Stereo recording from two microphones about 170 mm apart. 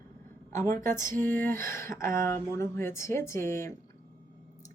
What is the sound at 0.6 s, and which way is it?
Speech, 15° left (ahead or behind).